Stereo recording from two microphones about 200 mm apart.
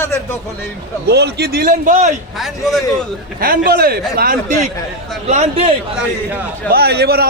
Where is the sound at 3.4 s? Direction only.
50° right (ahead or behind).